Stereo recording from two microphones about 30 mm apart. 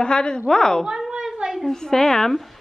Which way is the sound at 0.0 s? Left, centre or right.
Left.